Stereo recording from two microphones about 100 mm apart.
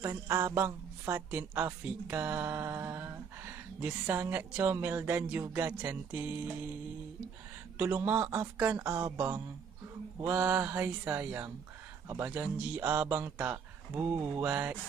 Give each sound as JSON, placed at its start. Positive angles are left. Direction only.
{"t": 0.0, "sound": "a sound", "side_deg": -30}
{"t": 0.6, "sound": "speech", "side_deg": -25}
{"t": 4.7, "sound": "music", "side_deg": -20}
{"t": 7.7, "sound": "speech", "side_deg": -20}
{"t": 8.7, "sound": "a sound", "side_deg": -35}
{"t": 10.2, "sound": "music", "side_deg": -20}
{"t": 12.3, "sound": "speech", "side_deg": -15}